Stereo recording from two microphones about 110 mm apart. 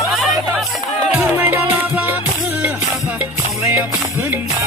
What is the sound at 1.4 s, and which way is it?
Music, 20° right (ahead or behind).